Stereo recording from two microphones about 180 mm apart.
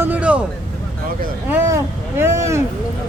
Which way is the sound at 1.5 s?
15° right (ahead or behind).